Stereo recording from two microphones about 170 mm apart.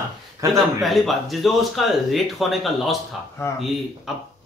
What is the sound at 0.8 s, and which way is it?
Speech, centre (ahead or behind).